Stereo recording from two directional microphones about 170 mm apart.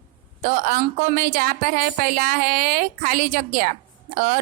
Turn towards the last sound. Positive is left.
turn(degrees=-50)  # may be behind; listen again after turning